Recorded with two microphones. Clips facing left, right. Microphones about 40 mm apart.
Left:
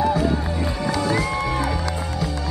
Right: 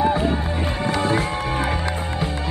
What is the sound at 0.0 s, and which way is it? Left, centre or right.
Music, right.